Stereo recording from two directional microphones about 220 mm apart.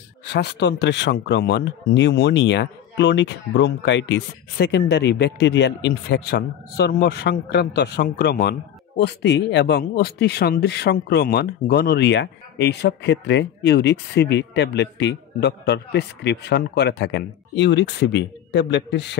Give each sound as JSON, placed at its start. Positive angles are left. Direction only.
{"t": 0.3, "sound": "speech", "side_deg": 50}